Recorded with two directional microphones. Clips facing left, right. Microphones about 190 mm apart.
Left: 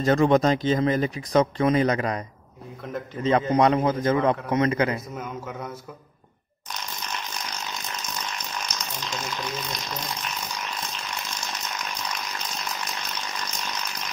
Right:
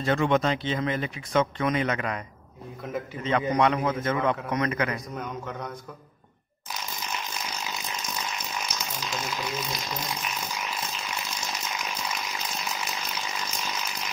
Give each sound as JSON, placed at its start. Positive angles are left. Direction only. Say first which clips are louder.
{"t": 0.0, "sound": "speech", "louder": "left 5 dB", "side_deg": 40}
{"t": 5.1, "sound": "a man's voice", "louder": "left 1 dB", "side_deg": 5}
{"t": 6.7, "sound": "ratchet", "louder": "even", "side_deg": -5}